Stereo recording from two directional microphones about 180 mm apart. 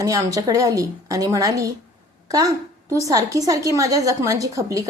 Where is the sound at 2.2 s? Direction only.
20° right (ahead or behind).